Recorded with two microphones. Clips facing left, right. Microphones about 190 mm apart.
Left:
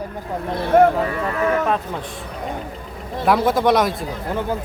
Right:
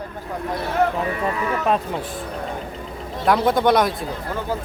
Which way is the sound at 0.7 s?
55° left (ahead or behind).